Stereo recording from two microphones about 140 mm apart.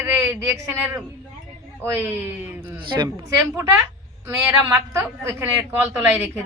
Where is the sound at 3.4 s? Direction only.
20° right (ahead or behind).